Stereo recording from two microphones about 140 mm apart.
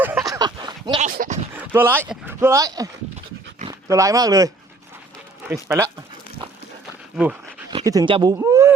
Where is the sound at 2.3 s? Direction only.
20° right (ahead or behind).